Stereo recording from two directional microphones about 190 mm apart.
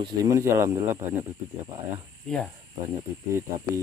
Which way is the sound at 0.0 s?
15° right (ahead or behind).